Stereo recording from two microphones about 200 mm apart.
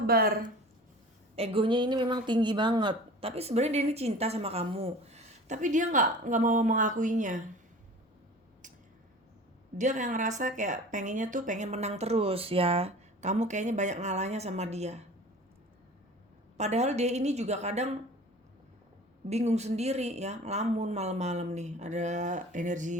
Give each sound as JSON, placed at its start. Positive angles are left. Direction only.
{"t": 0.1, "sound": "speech", "side_deg": -50}
{"t": 1.4, "sound": "speech", "side_deg": -25}
{"t": 9.7, "sound": "speech", "side_deg": -40}
{"t": 16.6, "sound": "speech", "side_deg": -35}
{"t": 19.3, "sound": "speech", "side_deg": -35}